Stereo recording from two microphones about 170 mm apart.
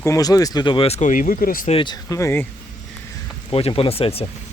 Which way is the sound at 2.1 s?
15° left (ahead or behind).